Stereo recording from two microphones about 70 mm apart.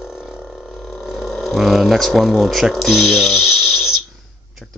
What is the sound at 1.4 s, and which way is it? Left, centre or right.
Speech, centre.